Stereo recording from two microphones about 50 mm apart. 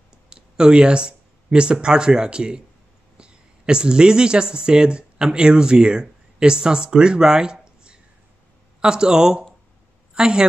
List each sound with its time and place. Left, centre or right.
0.3 s a woman's voice: centre